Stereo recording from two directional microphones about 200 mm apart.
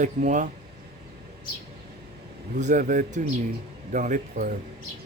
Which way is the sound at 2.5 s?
35° right (ahead or behind).